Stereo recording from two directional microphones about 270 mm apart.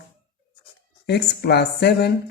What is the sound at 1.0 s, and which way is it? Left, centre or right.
Speech, left.